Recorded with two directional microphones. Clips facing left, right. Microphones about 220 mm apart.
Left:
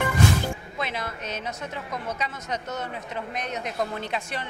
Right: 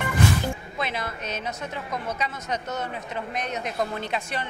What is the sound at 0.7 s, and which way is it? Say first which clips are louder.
Music: right 1 dB; 20° right (ahead or behind).